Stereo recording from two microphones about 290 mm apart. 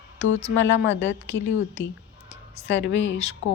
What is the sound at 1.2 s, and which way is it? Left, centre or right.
Speech, centre.